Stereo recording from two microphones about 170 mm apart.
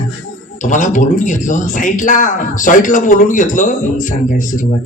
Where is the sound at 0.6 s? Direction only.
50° left (ahead or behind).